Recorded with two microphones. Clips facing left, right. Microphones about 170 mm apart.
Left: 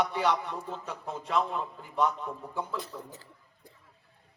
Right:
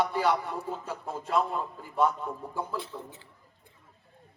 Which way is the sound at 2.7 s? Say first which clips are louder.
Right 1 dB; 40° left (ahead or behind).